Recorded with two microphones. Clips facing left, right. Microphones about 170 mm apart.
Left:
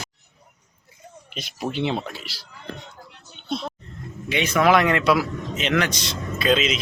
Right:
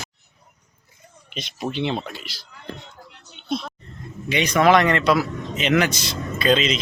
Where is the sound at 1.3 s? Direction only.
5° left (ahead or behind).